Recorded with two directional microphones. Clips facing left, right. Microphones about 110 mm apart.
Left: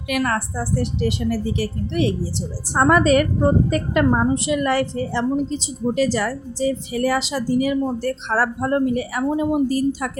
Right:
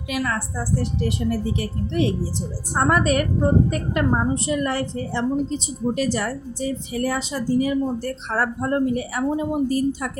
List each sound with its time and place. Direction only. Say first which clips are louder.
0.1 s a woman's voice: left 4 dB; 60° left (ahead or behind); by 10.1 s 90° left